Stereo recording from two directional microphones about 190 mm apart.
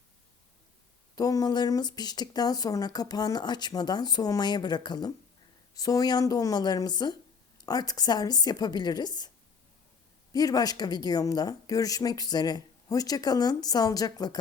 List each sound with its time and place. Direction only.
1.1 s speech: 20° left (ahead or behind)
10.3 s speech: 20° left (ahead or behind)